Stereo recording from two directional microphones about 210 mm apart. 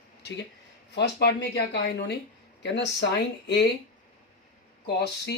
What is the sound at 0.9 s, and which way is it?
Speech, 50° left (ahead or behind).